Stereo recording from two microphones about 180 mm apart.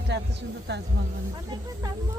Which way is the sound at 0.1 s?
70° right (ahead or behind).